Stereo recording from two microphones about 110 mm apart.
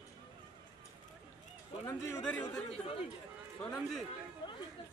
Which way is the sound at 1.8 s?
35° left (ahead or behind).